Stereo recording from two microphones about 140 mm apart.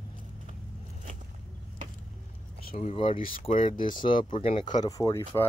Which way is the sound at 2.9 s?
40° left (ahead or behind).